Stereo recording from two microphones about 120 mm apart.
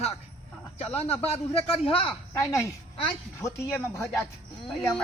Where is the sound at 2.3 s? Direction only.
25° left (ahead or behind).